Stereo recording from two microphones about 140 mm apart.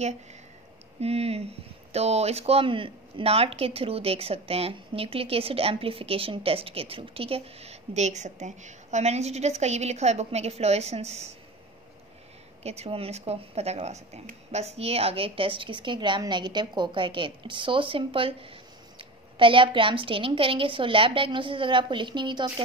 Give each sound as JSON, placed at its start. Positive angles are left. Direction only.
{"t": 1.0, "sound": "speech", "side_deg": -45}
{"t": 12.6, "sound": "a woman's voice", "side_deg": -50}